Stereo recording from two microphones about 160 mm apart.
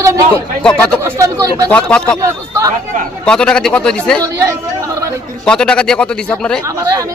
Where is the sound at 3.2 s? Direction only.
5° left (ahead or behind).